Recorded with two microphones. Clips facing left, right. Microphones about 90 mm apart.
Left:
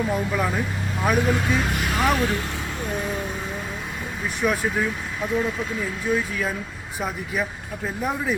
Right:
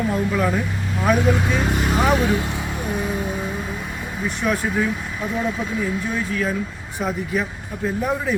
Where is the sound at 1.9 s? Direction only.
20° right (ahead or behind).